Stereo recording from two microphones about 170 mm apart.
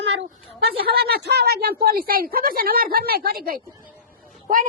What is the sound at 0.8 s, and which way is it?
Speech, 65° right (ahead or behind).